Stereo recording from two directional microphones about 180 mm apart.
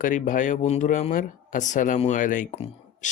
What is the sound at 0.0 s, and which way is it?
Speech, 45° left (ahead or behind).